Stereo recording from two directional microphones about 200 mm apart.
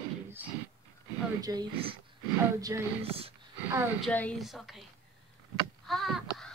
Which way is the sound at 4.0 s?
5° left (ahead or behind).